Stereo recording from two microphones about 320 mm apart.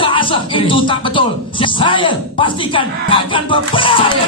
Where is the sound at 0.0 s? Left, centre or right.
Centre.